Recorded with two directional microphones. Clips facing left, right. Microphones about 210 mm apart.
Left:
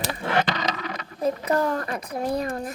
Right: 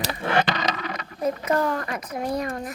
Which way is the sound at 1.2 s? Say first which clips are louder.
Even; 30° left (ahead or behind).